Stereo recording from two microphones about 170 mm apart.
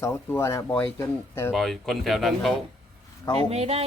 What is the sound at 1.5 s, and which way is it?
Speech, centre (ahead or behind).